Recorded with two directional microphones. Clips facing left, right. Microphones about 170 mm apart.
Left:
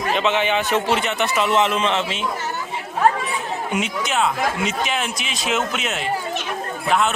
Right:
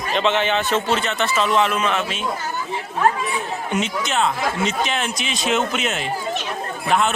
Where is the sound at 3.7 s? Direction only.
10° left (ahead or behind).